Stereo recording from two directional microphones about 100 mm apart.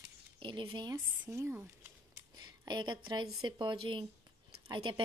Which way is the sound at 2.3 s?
45° right (ahead or behind).